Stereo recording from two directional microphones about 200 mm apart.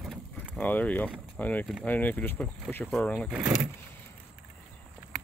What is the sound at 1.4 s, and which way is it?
Speech, 10° left (ahead or behind).